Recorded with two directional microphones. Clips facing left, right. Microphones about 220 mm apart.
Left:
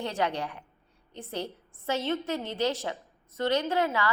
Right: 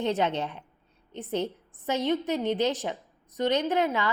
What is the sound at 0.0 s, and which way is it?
A woman's voice, 20° right (ahead or behind).